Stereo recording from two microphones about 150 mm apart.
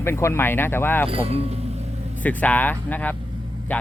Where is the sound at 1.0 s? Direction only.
40° right (ahead or behind).